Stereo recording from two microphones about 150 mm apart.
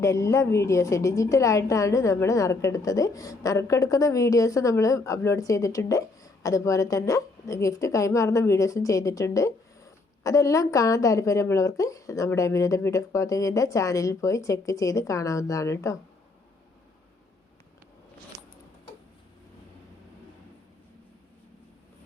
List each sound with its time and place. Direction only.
0.0 s a woman's voice: 20° left (ahead or behind)